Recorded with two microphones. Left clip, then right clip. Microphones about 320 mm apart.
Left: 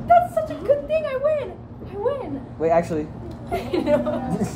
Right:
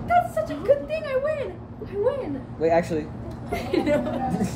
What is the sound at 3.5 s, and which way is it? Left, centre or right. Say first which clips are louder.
Speech: left 2 dB; centre.